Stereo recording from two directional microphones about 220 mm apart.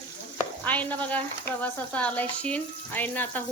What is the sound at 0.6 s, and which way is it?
Frying, 5° left (ahead or behind).